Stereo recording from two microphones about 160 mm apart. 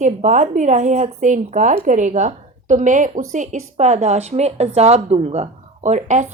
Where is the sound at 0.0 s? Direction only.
50° right (ahead or behind).